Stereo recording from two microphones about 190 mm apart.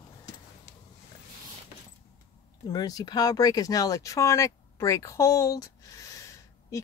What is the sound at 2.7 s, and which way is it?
Speech, 20° left (ahead or behind).